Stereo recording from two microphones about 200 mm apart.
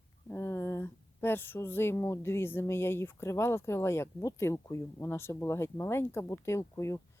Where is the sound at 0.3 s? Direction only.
10° left (ahead or behind).